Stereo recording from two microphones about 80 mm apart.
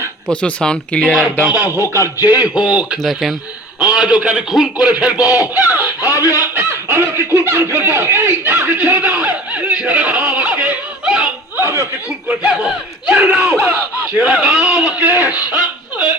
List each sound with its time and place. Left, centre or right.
0.3 s speech: centre
1.5 s speech: right
1.7 s speech: left
2.1 s speech: right
2.6 s a man's voice: centre
3.0 s a man's voice: centre
5.2 s speech: left
6.7 s speech: right; by 11.3 s centre
11.5 s chuckle: right
12.3 s a man's voice: centre; by 13.7 s right
14.2 s a man's voice: centre
15.4 s chuckle: centre